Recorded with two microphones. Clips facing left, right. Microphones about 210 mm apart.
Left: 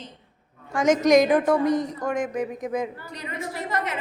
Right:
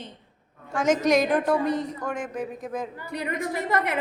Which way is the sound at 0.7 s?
10° left (ahead or behind).